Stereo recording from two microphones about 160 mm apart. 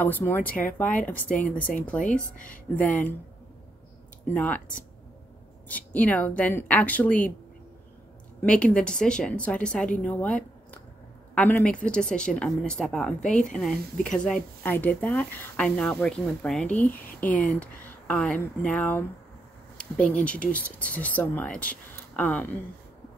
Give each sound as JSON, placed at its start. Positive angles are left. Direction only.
{"t": 0.0, "sound": "speech", "side_deg": 15}
{"t": 1.8, "sound": "speech", "side_deg": 10}
{"t": 2.3, "sound": "speech", "side_deg": 55}
{"t": 2.7, "sound": "speech", "side_deg": 10}
{"t": 4.3, "sound": "speech", "side_deg": 10}
{"t": 5.7, "sound": "speech", "side_deg": 10}
{"t": 8.4, "sound": "speech", "side_deg": 10}